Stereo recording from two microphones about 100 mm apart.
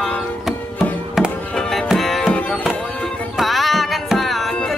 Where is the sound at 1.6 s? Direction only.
5° left (ahead or behind).